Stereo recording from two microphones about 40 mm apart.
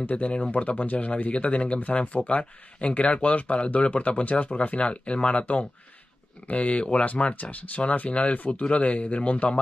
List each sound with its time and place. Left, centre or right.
0.1 s speech: left
4.2 s speech: left
4.6 s speech: left